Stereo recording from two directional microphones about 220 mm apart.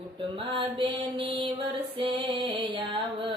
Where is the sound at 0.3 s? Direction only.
25° right (ahead or behind).